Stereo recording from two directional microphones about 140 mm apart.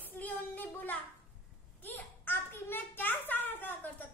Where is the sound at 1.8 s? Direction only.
15° left (ahead or behind).